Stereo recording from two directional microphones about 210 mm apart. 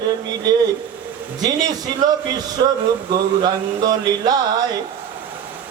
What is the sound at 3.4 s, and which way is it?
Speech, 20° right (ahead or behind).